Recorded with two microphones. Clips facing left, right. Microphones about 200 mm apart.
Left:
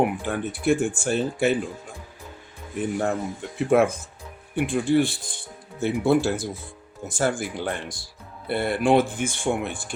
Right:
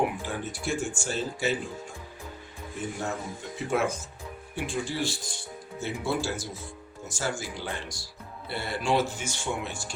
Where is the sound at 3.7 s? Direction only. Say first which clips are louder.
Left 8 dB; 55° left (ahead or behind).